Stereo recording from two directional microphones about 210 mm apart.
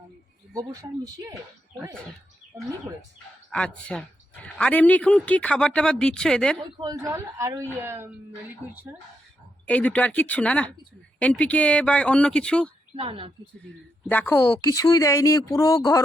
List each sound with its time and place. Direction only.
0.5 s speech: 15° right (ahead or behind)
3.5 s speech: 5° left (ahead or behind)
6.7 s speech: 20° right (ahead or behind)
9.6 s speech: 5° left (ahead or behind)
13.0 s a woman's voice: 25° right (ahead or behind)
14.1 s speech: 10° left (ahead or behind)